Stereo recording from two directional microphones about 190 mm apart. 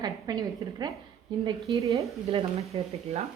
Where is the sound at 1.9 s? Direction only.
30° right (ahead or behind).